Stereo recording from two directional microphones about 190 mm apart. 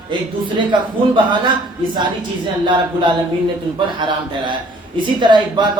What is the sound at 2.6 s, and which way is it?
Speech, 25° right (ahead or behind).